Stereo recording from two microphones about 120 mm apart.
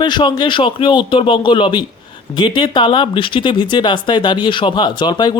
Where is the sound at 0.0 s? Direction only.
40° left (ahead or behind).